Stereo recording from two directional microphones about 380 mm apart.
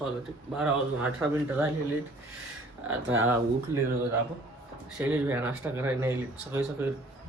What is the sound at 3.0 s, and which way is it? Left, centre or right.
Speech, right.